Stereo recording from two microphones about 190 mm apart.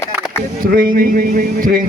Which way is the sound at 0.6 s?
50° right (ahead or behind).